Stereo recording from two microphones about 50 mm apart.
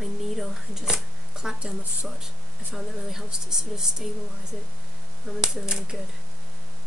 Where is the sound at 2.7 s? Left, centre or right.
Centre.